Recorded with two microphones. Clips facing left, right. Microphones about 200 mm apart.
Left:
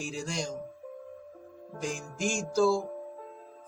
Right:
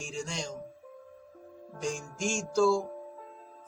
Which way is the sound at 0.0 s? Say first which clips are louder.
Left 2 dB; 5° left (ahead or behind).